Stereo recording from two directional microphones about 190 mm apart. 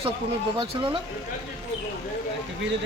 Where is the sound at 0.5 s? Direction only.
25° right (ahead or behind).